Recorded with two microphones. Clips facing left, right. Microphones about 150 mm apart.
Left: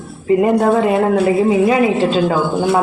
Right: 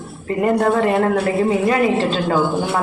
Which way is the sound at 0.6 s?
10° left (ahead or behind).